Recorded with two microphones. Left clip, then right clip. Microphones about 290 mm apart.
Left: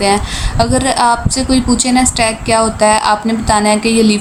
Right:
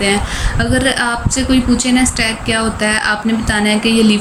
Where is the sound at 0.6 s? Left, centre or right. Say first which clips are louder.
Left 4 dB; centre.